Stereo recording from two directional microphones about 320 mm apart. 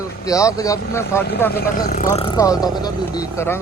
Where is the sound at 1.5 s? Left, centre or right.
Left.